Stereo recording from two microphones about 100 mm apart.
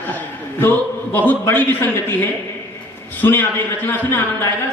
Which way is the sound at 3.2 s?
20° left (ahead or behind).